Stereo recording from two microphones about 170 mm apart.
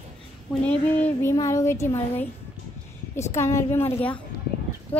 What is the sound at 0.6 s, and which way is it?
Speech, 10° left (ahead or behind).